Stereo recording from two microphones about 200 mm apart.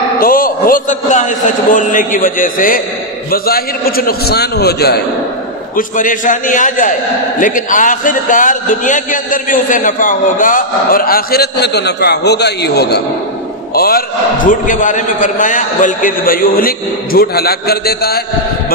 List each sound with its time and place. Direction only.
0.2 s a man's voice: 45° left (ahead or behind)
5.8 s a man's voice: 40° left (ahead or behind)